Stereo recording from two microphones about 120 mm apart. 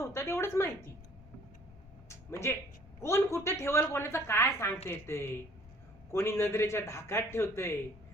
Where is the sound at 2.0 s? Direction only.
25° left (ahead or behind).